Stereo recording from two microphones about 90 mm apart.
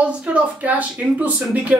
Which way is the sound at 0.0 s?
15° right (ahead or behind).